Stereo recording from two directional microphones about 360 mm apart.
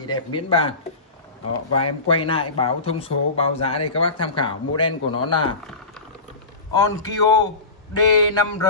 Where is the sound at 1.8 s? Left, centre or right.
Centre.